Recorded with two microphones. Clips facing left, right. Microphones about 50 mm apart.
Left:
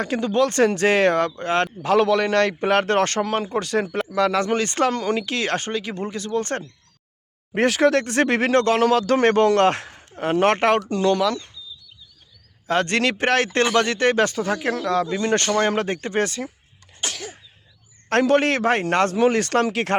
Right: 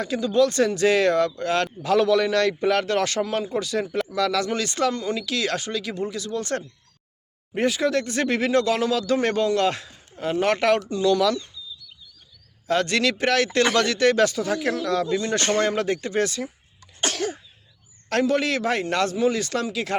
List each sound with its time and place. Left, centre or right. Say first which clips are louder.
0.0 s speech: even; left
4.1 s speech: left 5 dB; left
7.5 s speech: left 4 dB; left
11.2 s speech: even; left
12.6 s speech: left 1 dB; left
17.0 s sneeze: right 5 dB; right
18.1 s speech: left 4 dB; left
19.1 s speech: left 4 dB; left